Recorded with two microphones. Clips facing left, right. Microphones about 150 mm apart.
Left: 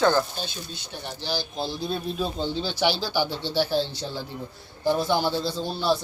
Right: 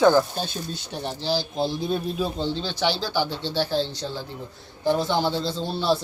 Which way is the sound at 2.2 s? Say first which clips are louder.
Right 2 dB; 5° right (ahead or behind).